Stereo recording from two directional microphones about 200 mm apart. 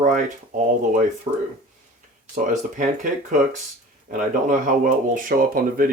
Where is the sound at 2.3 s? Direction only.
40° right (ahead or behind).